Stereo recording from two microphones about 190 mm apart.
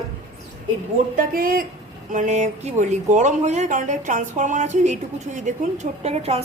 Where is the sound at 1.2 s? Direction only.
50° right (ahead or behind).